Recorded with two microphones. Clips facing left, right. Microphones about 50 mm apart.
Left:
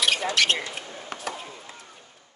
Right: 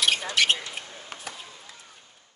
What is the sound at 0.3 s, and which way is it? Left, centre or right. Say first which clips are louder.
Speech: even; centre.